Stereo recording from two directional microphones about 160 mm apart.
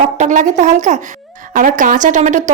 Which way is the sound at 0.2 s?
50° right (ahead or behind).